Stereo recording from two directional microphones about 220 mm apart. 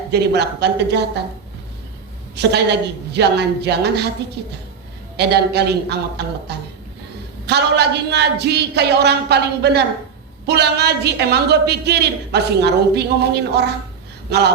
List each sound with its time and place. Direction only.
0.1 s a woman's voice: 50° right (ahead or behind)
2.3 s a woman's voice: 50° right (ahead or behind)
7.4 s a woman's voice: 50° right (ahead or behind)